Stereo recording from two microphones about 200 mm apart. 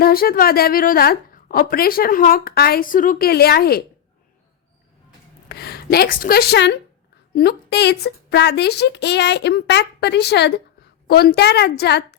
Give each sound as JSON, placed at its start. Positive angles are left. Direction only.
{"t": 0.0, "sound": "a woman's voice", "side_deg": 50}
{"t": 5.5, "sound": "a woman's voice", "side_deg": 55}